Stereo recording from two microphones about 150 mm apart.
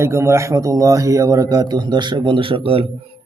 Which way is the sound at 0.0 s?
20° right (ahead or behind).